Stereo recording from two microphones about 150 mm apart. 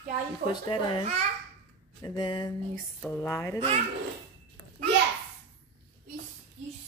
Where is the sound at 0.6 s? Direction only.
35° left (ahead or behind).